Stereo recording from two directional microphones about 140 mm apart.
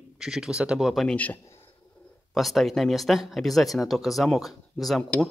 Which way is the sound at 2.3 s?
Centre (ahead or behind).